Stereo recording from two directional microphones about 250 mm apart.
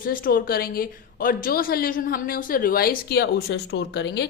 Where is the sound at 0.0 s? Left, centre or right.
Left.